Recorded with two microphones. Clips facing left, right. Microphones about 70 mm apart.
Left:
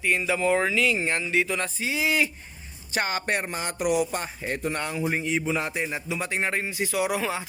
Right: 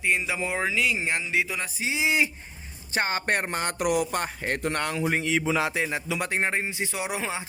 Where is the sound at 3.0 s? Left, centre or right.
Right.